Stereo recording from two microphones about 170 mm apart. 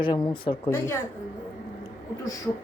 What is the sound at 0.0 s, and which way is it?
Speech, 30° left (ahead or behind).